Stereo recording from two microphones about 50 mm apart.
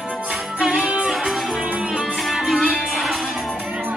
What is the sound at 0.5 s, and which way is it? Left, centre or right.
Music, centre.